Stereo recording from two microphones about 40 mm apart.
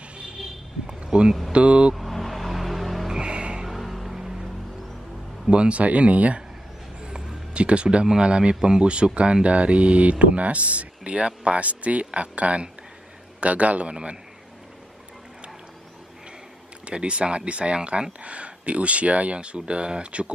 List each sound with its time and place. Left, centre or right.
0.8 s a sound: right
1.5 s speech: right
2.0 s a sound: centre
3.1 s music: right
3.6 s a sound: centre
5.5 s speech: right
7.1 s music: centre
7.5 s speech: right
16.8 s speech: right